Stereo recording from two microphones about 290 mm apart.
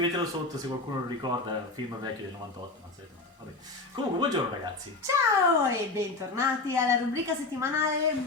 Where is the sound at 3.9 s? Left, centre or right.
Centre.